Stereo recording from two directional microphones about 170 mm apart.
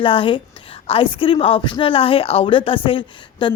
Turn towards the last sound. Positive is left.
turn(degrees=30)  # may be behind; listen again after turning